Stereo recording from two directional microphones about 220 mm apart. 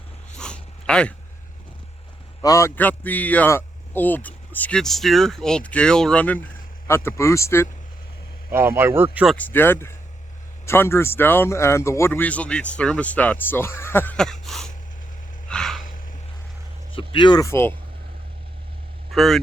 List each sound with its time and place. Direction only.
0.3 s dog: 5° left (ahead or behind)
2.4 s a man's voice: 15° left (ahead or behind)
8.4 s a man's voice: 10° right (ahead or behind); by 14.3 s 5° left (ahead or behind)
14.4 s sneeze: centre (ahead or behind)
15.4 s gasp: 5° left (ahead or behind)
16.9 s speech: 20° left (ahead or behind)
19.1 s speech: centre (ahead or behind)